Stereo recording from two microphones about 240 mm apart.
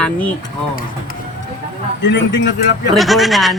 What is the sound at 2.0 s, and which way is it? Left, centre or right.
Speech, left.